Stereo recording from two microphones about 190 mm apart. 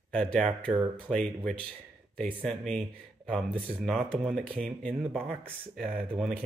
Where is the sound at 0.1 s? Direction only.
5° left (ahead or behind).